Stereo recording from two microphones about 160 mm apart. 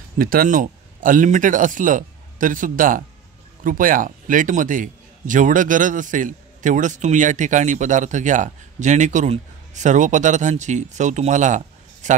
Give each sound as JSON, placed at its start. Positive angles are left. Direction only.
{"t": 0.2, "sound": "a man's voice", "side_deg": -65}